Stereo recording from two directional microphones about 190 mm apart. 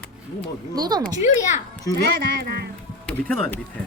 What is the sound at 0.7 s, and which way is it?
Speech, 20° right (ahead or behind).